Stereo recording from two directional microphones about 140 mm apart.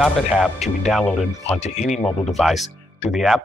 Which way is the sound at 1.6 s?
55° left (ahead or behind).